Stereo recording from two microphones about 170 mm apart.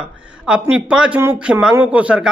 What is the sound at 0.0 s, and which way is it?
Speech, 5° right (ahead or behind).